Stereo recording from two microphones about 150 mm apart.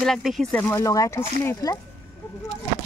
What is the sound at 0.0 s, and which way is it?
Speech, centre (ahead or behind).